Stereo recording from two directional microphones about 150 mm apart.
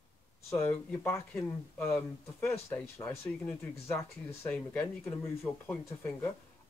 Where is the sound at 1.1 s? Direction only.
15° left (ahead or behind).